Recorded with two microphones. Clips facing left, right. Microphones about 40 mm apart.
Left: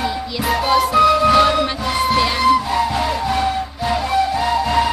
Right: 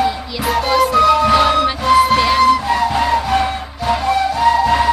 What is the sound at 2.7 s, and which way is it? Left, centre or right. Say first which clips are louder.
Music: right 4 dB; centre.